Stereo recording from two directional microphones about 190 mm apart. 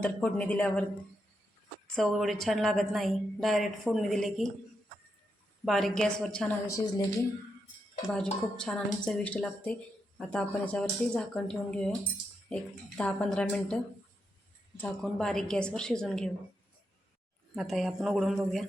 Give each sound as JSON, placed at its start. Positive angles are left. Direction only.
{"t": 0.0, "sound": "speech", "side_deg": 5}
{"t": 2.0, "sound": "a woman's voice", "side_deg": 0}
{"t": 5.6, "sound": "a woman's voice", "side_deg": 0}
{"t": 6.7, "sound": "speech", "side_deg": 20}
{"t": 8.1, "sound": "a woman's voice", "side_deg": 5}
{"t": 13.0, "sound": "a woman's voice", "side_deg": 5}
{"t": 14.8, "sound": "a woman's voice", "side_deg": 5}
{"t": 17.5, "sound": "a woman's voice", "side_deg": 0}